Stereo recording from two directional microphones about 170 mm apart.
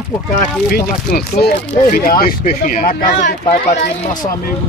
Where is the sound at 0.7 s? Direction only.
60° left (ahead or behind).